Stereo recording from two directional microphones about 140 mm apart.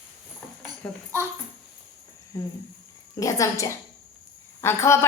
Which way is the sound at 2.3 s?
25° left (ahead or behind).